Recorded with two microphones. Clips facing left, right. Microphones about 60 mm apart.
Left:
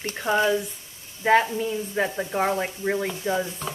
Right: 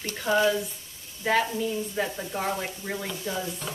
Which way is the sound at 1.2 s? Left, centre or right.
Left.